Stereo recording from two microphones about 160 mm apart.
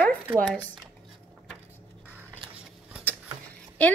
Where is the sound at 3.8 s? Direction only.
10° left (ahead or behind).